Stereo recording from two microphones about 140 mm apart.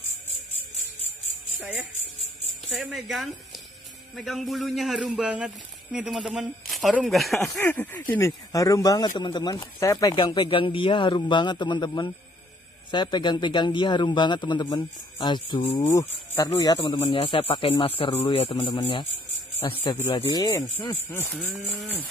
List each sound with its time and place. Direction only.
2.7 s speech: centre (ahead or behind)
7.6 s speech: 10° left (ahead or behind)
8.3 s speech: 25° left (ahead or behind)
15.8 s speech: 20° left (ahead or behind)